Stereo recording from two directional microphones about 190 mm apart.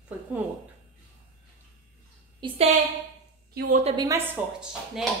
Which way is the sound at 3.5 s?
50° right (ahead or behind).